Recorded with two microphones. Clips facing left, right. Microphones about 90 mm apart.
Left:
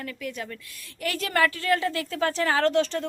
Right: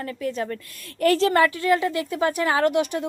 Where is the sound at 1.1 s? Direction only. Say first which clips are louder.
Right 1 dB; 25° right (ahead or behind).